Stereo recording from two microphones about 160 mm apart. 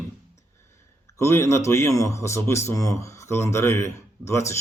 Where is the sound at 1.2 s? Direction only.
15° left (ahead or behind).